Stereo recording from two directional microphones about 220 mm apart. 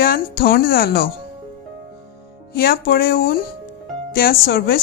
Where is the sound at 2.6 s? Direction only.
45° left (ahead or behind).